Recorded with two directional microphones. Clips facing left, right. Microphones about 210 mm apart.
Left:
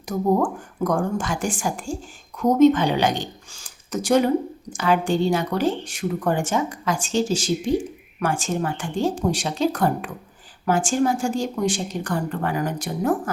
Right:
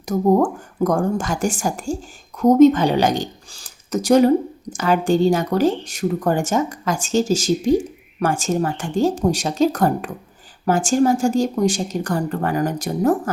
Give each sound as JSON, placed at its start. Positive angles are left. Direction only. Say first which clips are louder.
{"t": 0.0, "sound": "speech", "louder": "right 4 dB", "side_deg": -40}